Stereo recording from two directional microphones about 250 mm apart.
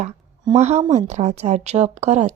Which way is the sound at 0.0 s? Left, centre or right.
Right.